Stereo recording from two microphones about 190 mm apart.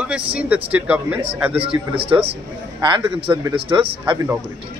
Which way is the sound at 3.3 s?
20° right (ahead or behind).